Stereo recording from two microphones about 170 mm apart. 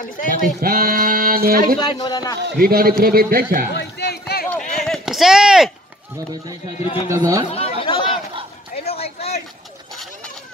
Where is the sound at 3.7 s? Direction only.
75° left (ahead or behind).